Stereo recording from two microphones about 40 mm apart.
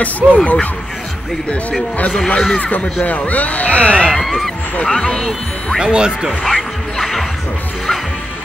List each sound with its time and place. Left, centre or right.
0.2 s speech: right
1.5 s speech: left
4.0 s speech: centre
5.8 s speech: right
6.4 s music: centre